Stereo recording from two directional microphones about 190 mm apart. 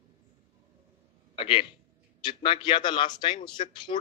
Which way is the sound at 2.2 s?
25° left (ahead or behind).